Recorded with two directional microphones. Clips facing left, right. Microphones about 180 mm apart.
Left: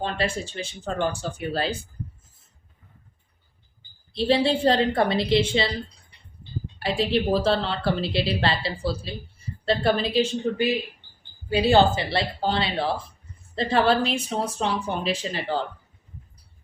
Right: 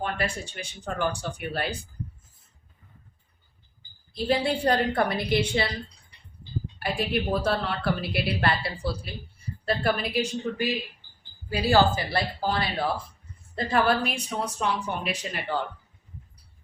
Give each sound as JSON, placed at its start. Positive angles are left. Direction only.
{"t": 0.0, "sound": "a woman's voice", "side_deg": 25}
{"t": 4.1, "sound": "a woman's voice", "side_deg": 25}
{"t": 6.7, "sound": "a woman's voice", "side_deg": 30}